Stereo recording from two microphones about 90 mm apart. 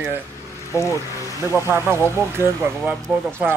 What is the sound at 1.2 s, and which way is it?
Speech, 40° left (ahead or behind).